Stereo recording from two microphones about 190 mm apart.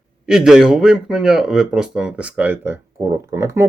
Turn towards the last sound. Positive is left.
turn(degrees=-15)  # may be behind; listen again after turning